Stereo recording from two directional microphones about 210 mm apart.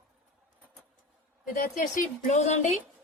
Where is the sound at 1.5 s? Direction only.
40° left (ahead or behind).